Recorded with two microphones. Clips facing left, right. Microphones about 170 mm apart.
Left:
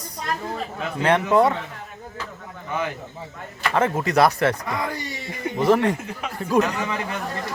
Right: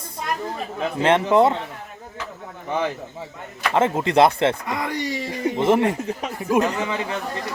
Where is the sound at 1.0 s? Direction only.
25° right (ahead or behind).